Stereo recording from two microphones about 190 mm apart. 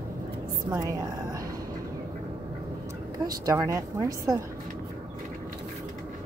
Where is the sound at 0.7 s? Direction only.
20° right (ahead or behind).